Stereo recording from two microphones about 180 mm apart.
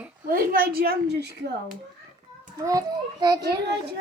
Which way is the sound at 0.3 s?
55° right (ahead or behind).